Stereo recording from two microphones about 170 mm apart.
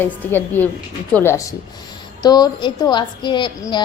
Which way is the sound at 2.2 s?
25° left (ahead or behind).